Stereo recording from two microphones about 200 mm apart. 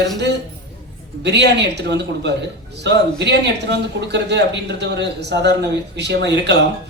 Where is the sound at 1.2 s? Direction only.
60° right (ahead or behind).